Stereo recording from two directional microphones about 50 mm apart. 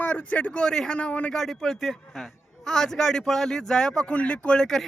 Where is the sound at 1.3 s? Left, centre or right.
Centre.